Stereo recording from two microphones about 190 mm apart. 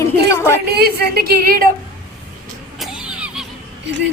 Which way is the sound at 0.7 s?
55° right (ahead or behind).